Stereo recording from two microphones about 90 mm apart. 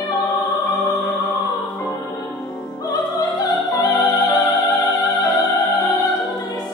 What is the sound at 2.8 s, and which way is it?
Music, 40° left (ahead or behind).